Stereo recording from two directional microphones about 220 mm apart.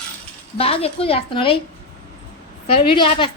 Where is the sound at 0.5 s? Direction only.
25° left (ahead or behind).